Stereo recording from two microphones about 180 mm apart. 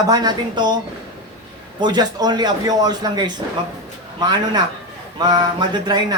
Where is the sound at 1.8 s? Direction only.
25° right (ahead or behind).